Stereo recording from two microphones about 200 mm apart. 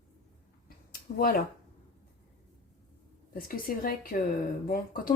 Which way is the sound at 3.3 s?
45° left (ahead or behind).